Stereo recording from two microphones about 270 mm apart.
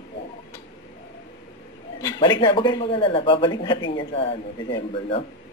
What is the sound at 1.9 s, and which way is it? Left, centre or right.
Speech, centre.